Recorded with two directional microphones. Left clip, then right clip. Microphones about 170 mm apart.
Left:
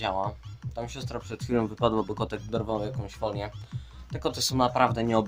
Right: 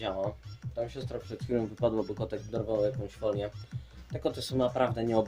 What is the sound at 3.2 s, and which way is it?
Speech, 60° left (ahead or behind).